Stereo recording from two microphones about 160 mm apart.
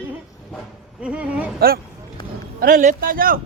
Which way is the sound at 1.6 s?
75° right (ahead or behind).